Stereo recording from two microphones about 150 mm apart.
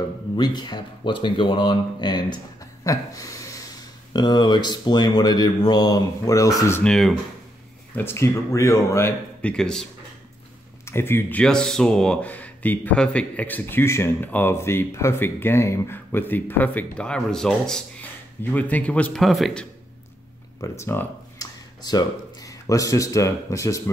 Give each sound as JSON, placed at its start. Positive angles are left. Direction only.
{"t": 0.4, "sound": "speech", "side_deg": 30}
{"t": 6.8, "sound": "speech", "side_deg": 0}
{"t": 7.9, "sound": "speech", "side_deg": 15}
{"t": 9.4, "sound": "speech", "side_deg": 5}
{"t": 10.9, "sound": "speech", "side_deg": 15}
{"t": 20.6, "sound": "speech", "side_deg": 20}